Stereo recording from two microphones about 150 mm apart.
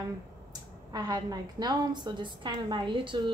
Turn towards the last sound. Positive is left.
turn(degrees=-30)  # may be behind; listen again after turning